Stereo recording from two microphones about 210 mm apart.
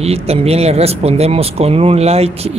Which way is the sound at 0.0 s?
30° right (ahead or behind).